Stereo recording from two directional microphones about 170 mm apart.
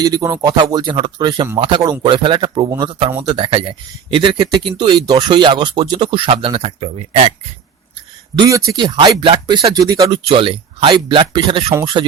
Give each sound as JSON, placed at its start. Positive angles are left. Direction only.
{"t": 0.0, "sound": "speech", "side_deg": -20}
{"t": 8.4, "sound": "speech", "side_deg": -20}
{"t": 10.2, "sound": "speech", "side_deg": -30}